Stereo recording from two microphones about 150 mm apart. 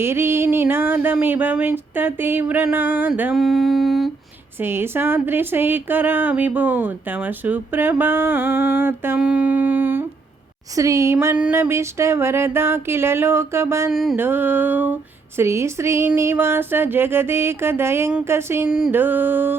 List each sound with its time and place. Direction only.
0.0 s speech: 15° right (ahead or behind)
4.6 s speech: 15° right (ahead or behind)
13.9 s mantra: centre (ahead or behind)
14.2 s speech: 15° right (ahead or behind)